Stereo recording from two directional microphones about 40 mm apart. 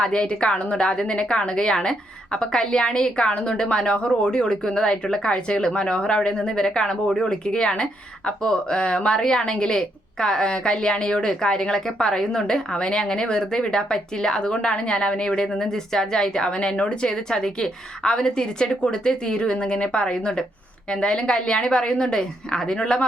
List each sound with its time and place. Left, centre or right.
0.0 s speech: left